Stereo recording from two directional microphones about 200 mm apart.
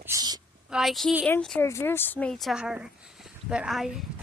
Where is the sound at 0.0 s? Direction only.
15° right (ahead or behind).